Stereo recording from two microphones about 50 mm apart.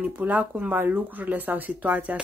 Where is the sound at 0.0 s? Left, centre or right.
Right.